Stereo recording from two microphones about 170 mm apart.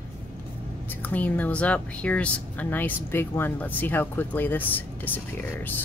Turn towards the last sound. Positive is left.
turn(degrees=10)  # may be behind; listen again after turning